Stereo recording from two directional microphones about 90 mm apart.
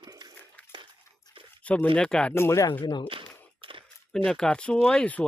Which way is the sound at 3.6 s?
75° right (ahead or behind).